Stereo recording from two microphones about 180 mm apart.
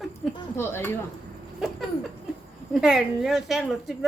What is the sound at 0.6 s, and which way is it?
Speech, 15° left (ahead or behind).